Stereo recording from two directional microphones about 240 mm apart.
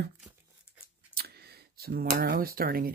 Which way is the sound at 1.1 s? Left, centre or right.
Right.